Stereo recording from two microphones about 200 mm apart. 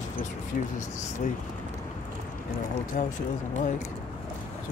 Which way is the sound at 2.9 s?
40° left (ahead or behind).